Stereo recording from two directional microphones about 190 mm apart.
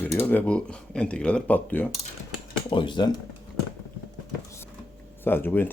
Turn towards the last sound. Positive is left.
turn(degrees=10)  # may be behind; listen again after turning